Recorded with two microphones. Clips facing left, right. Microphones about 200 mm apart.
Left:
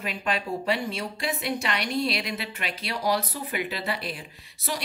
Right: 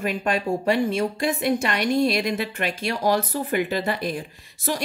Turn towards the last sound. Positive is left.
turn(degrees=-45)  # may be behind; listen again after turning